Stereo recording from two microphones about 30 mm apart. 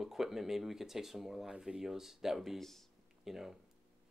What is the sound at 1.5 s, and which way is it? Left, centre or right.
Speech, right.